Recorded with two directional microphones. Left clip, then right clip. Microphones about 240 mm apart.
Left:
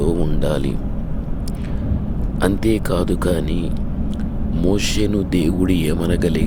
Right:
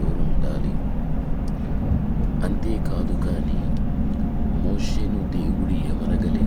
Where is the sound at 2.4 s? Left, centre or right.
Left.